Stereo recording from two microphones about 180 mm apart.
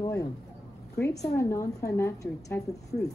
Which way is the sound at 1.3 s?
15° left (ahead or behind).